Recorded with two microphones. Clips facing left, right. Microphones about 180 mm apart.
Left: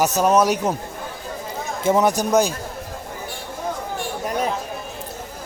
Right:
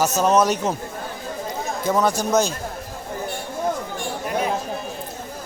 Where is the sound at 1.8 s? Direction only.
20° left (ahead or behind).